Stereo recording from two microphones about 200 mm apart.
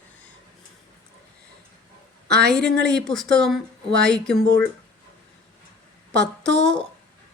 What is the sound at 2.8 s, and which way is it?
Speech, 5° left (ahead or behind).